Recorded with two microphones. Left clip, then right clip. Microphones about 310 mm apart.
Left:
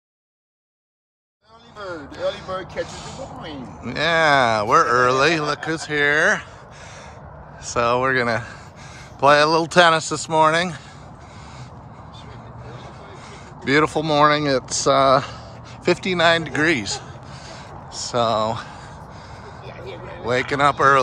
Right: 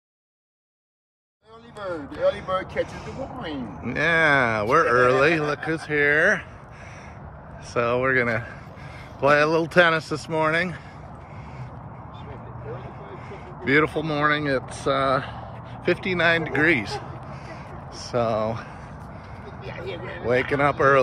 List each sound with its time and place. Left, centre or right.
3.8 s speech: centre
7.6 s speech: centre
13.7 s speech: centre
18.1 s speech: centre
19.6 s vehicle: right
20.2 s speech: centre